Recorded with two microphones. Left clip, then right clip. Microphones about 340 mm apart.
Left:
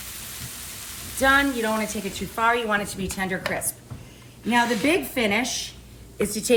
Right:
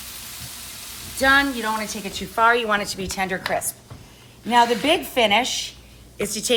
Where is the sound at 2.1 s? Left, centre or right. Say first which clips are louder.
Right 5 dB; right.